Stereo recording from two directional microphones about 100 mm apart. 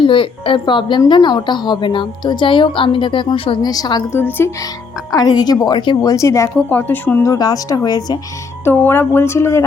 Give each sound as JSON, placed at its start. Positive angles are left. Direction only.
{"t": 0.0, "sound": "a woman's voice", "side_deg": 60}
{"t": 3.6, "sound": "a woman's voice", "side_deg": 40}
{"t": 4.1, "sound": "speech", "side_deg": 20}
{"t": 5.1, "sound": "a woman's voice", "side_deg": 40}
{"t": 6.0, "sound": "speech", "side_deg": 35}
{"t": 6.7, "sound": "speech", "side_deg": 20}
{"t": 7.3, "sound": "speech", "side_deg": 40}
{"t": 8.6, "sound": "speech", "side_deg": 20}